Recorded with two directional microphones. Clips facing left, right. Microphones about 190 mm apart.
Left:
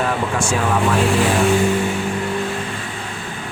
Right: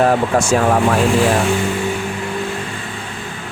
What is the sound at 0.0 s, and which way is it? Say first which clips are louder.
Speech: right 6 dB; 40° right (ahead or behind).